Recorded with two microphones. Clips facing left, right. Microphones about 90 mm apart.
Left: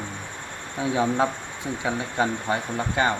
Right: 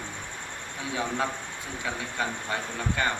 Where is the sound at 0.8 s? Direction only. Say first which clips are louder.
Left 7 dB; 25° left (ahead or behind).